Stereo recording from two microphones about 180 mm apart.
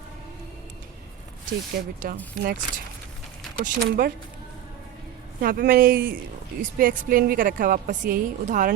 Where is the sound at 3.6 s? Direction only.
55° right (ahead or behind).